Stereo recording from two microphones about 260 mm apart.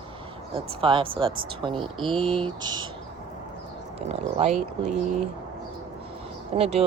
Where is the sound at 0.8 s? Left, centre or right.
Centre.